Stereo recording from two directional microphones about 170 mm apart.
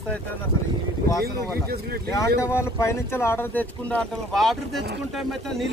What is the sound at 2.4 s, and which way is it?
Speech, 15° left (ahead or behind).